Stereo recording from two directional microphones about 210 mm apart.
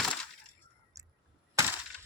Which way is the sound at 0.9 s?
15° right (ahead or behind).